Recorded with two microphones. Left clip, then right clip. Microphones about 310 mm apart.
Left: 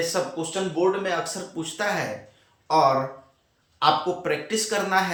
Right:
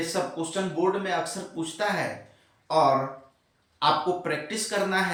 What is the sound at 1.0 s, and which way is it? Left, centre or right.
Speech, centre.